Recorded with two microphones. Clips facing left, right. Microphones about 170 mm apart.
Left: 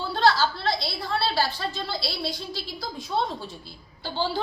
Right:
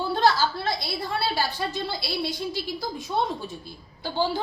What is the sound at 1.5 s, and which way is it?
A woman's voice, 15° right (ahead or behind).